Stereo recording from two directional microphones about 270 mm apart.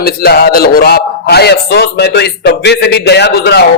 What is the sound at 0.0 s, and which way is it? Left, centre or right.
A man's voice, left.